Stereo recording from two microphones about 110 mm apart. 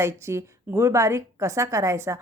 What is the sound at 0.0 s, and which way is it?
A woman's voice, 25° right (ahead or behind).